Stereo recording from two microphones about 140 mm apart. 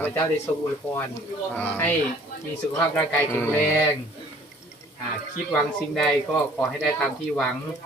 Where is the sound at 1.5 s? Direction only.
15° left (ahead or behind).